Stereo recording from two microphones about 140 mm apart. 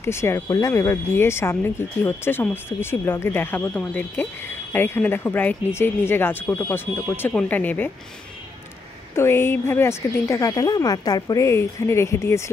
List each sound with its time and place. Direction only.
0.0 s speech: 20° left (ahead or behind)
9.1 s speech: 20° left (ahead or behind)